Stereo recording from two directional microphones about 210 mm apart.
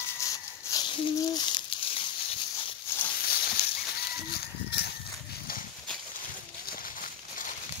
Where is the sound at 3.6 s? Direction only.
45° left (ahead or behind).